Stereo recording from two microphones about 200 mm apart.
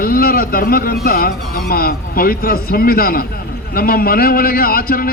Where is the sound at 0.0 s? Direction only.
50° left (ahead or behind).